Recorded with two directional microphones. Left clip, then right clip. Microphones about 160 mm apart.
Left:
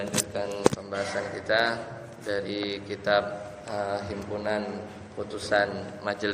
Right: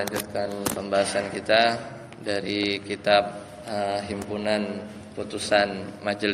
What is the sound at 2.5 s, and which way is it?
Speech, 90° right.